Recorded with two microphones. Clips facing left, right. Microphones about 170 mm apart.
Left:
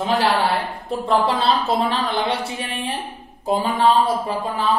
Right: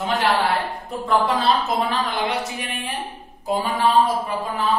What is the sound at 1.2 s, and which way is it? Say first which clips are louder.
Speech: left 1 dB; 30° left (ahead or behind).